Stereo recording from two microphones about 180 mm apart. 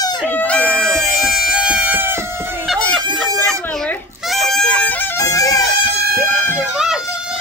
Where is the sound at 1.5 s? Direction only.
5° right (ahead or behind).